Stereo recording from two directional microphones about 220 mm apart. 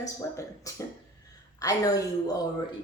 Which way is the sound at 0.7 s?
15° left (ahead or behind).